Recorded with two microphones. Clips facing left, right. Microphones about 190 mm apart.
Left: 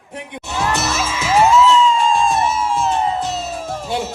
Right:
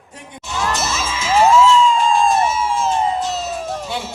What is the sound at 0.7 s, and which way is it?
Music, 60° left (ahead or behind).